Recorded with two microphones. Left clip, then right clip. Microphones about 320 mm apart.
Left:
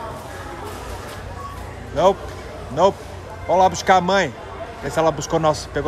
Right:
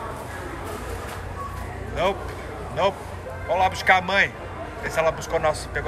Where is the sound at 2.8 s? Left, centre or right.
Centre.